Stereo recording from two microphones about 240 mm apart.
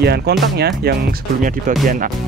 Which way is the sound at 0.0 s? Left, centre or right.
Right.